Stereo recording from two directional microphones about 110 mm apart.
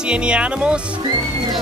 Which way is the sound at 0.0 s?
10° right (ahead or behind).